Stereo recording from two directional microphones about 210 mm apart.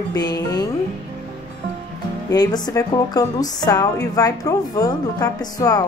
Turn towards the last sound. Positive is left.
turn(degrees=20)  # may be behind; listen again after turning